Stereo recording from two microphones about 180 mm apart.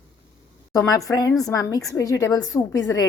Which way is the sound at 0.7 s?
20° left (ahead or behind).